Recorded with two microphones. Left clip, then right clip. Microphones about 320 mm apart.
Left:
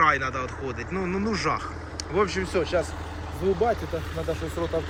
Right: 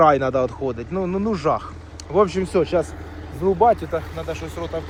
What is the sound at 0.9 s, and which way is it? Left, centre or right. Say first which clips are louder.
Speech: right 3 dB; centre.